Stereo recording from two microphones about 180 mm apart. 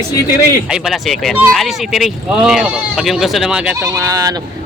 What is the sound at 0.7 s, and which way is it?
Speech, centre (ahead or behind).